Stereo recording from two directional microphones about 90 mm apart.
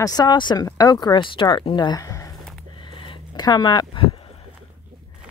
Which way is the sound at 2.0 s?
40° left (ahead or behind).